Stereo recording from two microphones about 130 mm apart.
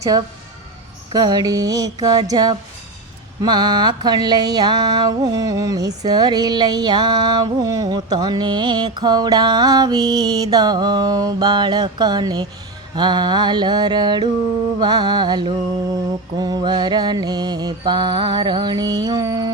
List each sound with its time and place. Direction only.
1.1 s music: 30° right (ahead or behind)